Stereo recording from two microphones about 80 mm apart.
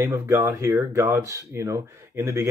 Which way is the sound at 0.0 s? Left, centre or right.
Right.